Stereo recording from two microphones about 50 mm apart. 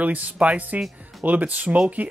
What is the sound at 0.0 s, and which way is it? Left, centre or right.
Speech, right.